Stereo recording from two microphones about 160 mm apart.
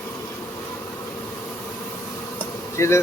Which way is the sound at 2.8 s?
15° left (ahead or behind).